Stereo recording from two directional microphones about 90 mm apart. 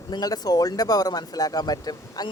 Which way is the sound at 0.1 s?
45° left (ahead or behind).